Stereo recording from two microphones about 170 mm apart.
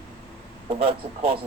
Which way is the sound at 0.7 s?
30° right (ahead or behind).